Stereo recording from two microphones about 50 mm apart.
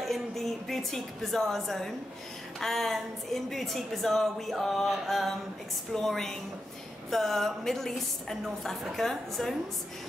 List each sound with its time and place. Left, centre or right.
0.0 s a woman's voice: centre